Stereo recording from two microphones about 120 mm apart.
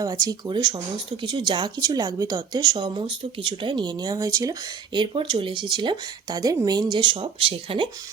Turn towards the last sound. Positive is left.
turn(degrees=-45)  # may be behind; listen again after turning